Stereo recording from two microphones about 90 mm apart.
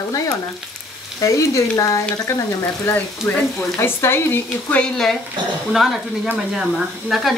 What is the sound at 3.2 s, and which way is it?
Speech, 25° left (ahead or behind).